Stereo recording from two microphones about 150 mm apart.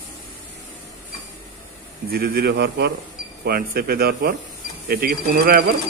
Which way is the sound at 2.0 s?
90° right.